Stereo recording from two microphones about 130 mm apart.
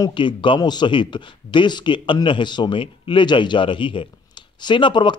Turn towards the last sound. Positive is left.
turn(degrees=40)  # may be behind; listen again after turning